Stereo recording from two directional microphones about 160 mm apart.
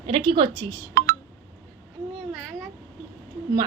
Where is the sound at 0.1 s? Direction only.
30° right (ahead or behind).